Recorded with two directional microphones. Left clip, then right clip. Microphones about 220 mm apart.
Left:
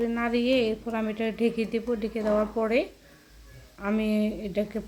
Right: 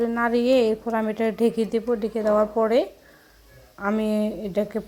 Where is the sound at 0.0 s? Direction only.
15° right (ahead or behind).